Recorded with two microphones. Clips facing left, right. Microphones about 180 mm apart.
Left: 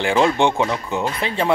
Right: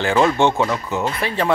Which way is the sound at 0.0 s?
15° left (ahead or behind).